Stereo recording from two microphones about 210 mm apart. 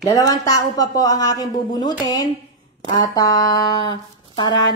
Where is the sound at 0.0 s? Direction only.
15° left (ahead or behind).